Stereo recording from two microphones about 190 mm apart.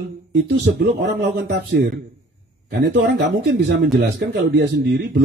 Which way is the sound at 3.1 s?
60° right (ahead or behind).